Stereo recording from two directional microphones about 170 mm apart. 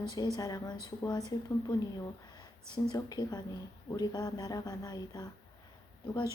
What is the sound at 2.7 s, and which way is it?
Speech, 25° left (ahead or behind).